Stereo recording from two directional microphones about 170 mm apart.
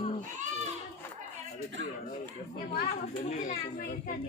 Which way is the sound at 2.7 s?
45° left (ahead or behind).